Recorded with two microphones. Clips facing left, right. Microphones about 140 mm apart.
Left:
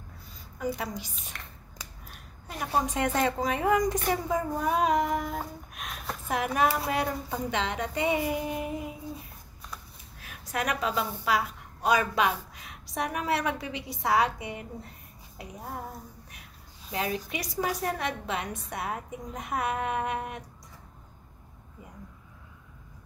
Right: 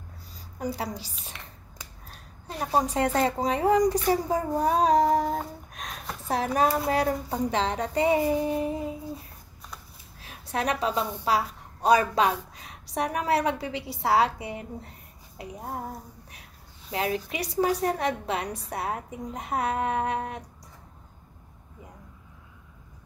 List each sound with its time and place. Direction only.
0.6 s a woman's voice: 35° right (ahead or behind)
1.3 s finger snapping: 5° right (ahead or behind)
2.0 s a woman's voice: 30° right (ahead or behind)
10.2 s a woman's voice: 30° right (ahead or behind)
16.9 s a woman's voice: 30° right (ahead or behind)